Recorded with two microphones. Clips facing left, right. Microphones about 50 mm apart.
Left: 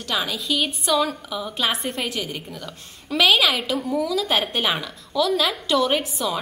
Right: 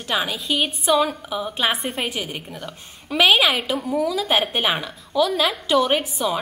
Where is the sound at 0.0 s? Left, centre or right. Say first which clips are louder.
Right 2 dB; right.